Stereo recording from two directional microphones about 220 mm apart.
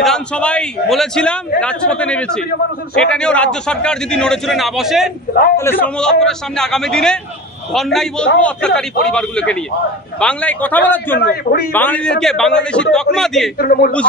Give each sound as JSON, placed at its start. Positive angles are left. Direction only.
{"t": 0.0, "sound": "a man's voice", "side_deg": 5}
{"t": 5.6, "sound": "a man's voice", "side_deg": 10}
{"t": 11.1, "sound": "a man's voice", "side_deg": 45}
{"t": 11.7, "sound": "a man's voice", "side_deg": 5}
{"t": 13.6, "sound": "speech", "side_deg": 40}